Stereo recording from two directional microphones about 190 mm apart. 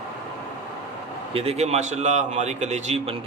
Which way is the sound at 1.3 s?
30° right (ahead or behind).